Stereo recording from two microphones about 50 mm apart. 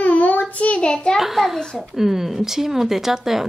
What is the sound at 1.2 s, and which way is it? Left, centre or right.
A woman's voice, centre.